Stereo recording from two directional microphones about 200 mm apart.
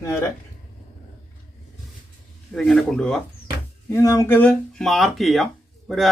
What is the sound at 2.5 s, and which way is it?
Speech, centre (ahead or behind).